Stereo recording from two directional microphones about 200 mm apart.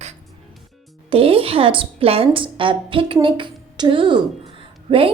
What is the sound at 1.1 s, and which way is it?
A woman's voice, 30° right (ahead or behind).